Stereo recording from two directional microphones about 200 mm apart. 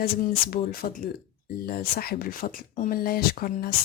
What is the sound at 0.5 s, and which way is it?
Speech, 45° left (ahead or behind).